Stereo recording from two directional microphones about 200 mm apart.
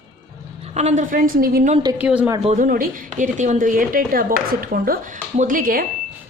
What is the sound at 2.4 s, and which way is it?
A woman's voice, 35° right (ahead or behind).